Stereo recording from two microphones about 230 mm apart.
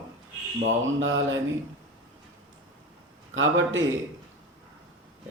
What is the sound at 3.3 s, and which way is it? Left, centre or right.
Speech, right.